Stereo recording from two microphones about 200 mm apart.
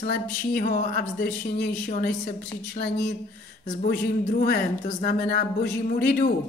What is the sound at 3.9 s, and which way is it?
Speech, 50° left (ahead or behind).